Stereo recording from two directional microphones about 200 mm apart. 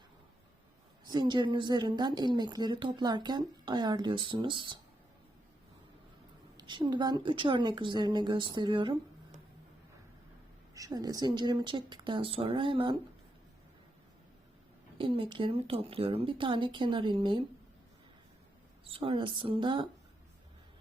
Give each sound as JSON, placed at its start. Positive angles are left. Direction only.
{"t": 1.0, "sound": "a woman's voice", "side_deg": -20}
{"t": 6.6, "sound": "a woman's voice", "side_deg": -25}
{"t": 10.8, "sound": "a woman's voice", "side_deg": -20}
{"t": 14.9, "sound": "a woman's voice", "side_deg": -25}
{"t": 18.9, "sound": "a woman's voice", "side_deg": -25}